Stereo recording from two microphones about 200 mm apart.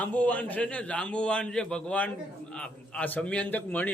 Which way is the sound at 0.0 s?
5° left (ahead or behind).